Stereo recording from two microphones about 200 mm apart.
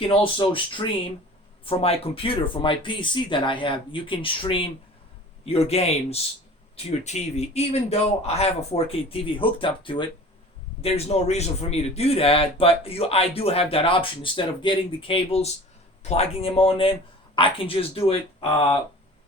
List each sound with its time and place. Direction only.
0.0 s a man's voice: 25° left (ahead or behind)